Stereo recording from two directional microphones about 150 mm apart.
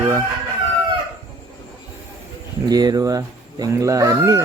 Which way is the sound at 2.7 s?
25° right (ahead or behind).